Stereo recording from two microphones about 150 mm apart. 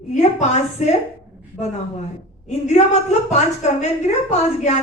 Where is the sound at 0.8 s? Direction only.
50° left (ahead or behind).